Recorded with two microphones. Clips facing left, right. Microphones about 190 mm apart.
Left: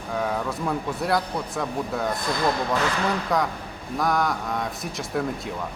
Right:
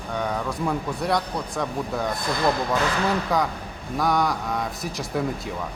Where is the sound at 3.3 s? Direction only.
Centre (ahead or behind).